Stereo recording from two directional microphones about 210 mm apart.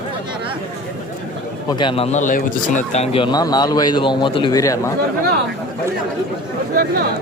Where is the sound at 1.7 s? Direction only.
25° left (ahead or behind).